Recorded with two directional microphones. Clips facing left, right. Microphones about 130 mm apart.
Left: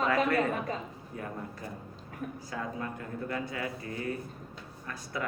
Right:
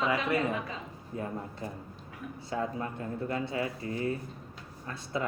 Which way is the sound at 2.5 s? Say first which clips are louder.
Right 5 dB; 25° right (ahead or behind).